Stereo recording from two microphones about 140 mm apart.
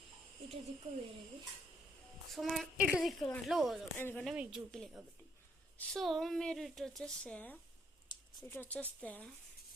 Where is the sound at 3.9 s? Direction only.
15° left (ahead or behind).